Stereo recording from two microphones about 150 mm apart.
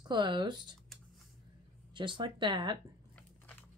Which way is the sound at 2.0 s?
30° right (ahead or behind).